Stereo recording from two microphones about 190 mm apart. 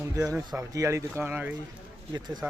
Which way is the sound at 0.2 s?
10° right (ahead or behind).